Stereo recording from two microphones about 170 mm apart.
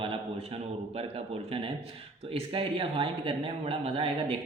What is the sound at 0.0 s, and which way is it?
A man's voice, 35° right (ahead or behind).